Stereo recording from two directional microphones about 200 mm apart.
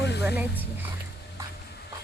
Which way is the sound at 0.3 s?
10° right (ahead or behind).